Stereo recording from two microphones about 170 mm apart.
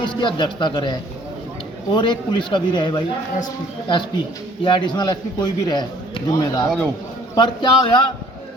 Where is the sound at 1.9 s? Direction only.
30° left (ahead or behind).